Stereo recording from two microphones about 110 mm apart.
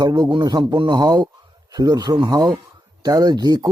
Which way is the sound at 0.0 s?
40° right (ahead or behind).